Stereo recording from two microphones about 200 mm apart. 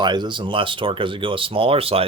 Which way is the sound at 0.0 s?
20° right (ahead or behind).